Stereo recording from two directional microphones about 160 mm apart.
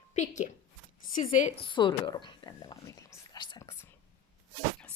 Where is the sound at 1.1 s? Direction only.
50° left (ahead or behind).